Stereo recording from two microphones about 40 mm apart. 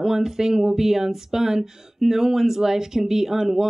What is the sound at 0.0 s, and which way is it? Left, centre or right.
Speech, centre.